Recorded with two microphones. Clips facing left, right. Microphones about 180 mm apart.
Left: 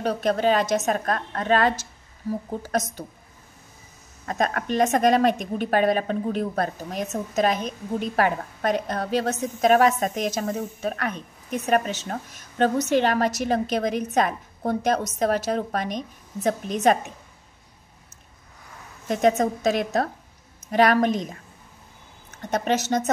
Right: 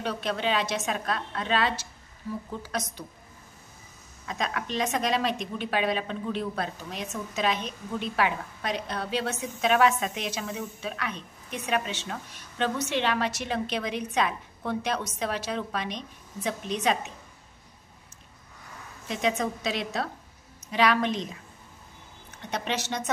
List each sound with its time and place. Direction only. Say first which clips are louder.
0.0 s a woman's voice: left 7 dB; 45° left (ahead or behind)
4.3 s a woman's voice: left 7 dB; 50° left (ahead or behind)
19.0 s a woman's voice: left 7 dB; 45° left (ahead or behind)